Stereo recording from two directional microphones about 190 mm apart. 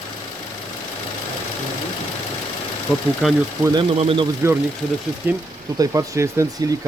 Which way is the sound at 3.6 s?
20° right (ahead or behind).